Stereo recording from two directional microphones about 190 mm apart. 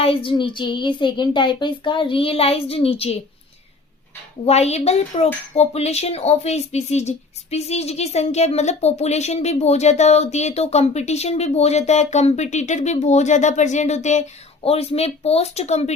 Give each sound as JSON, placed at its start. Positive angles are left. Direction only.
{"t": 0.0, "sound": "child singing", "side_deg": 30}
{"t": 4.4, "sound": "a woman's voice", "side_deg": 35}